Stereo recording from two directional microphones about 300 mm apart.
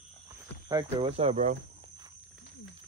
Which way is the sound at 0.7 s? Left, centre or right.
Centre.